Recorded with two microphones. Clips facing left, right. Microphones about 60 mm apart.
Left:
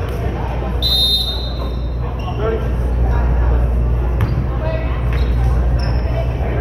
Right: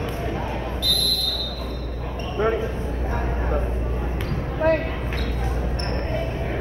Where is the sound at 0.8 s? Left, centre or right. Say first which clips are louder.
Left 6 dB; right.